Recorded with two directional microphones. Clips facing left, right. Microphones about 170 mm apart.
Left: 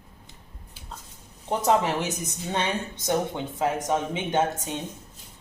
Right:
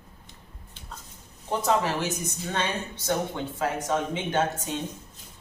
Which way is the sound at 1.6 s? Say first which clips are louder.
Left 2 dB; 20° left (ahead or behind).